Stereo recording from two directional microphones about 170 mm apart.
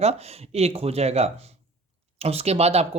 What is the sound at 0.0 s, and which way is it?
Speech, 40° right (ahead or behind).